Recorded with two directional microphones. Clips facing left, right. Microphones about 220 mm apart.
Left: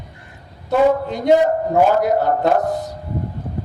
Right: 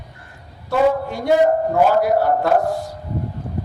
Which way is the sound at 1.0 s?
20° left (ahead or behind).